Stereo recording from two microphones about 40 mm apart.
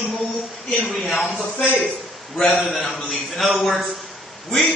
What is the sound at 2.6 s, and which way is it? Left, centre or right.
A man's voice, centre.